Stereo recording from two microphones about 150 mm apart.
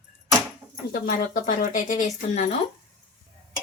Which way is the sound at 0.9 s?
65° left (ahead or behind).